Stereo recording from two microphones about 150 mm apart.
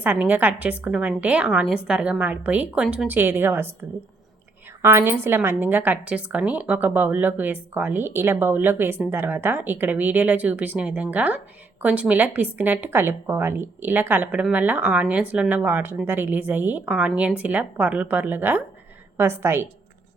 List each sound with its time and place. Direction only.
0.0 s a woman's voice: 10° right (ahead or behind)
4.8 s a woman's voice: 15° right (ahead or behind)